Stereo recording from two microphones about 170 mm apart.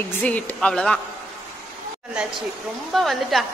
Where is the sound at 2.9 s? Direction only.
Centre (ahead or behind).